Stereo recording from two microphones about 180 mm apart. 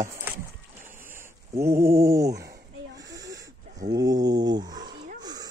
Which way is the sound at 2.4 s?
65° right (ahead or behind).